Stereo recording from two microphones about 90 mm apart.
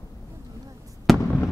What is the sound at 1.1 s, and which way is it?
Fireworks, centre (ahead or behind).